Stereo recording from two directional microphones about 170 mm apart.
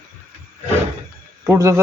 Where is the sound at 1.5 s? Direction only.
15° right (ahead or behind).